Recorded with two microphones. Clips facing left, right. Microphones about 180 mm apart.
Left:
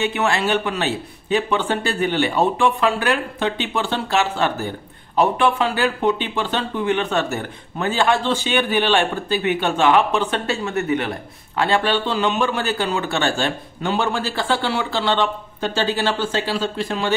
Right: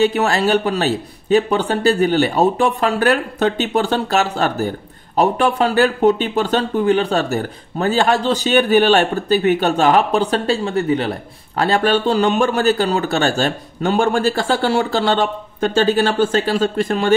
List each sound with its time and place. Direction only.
0.0 s speech: 40° right (ahead or behind)